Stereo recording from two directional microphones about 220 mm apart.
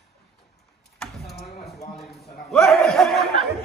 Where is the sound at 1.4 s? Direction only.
30° left (ahead or behind).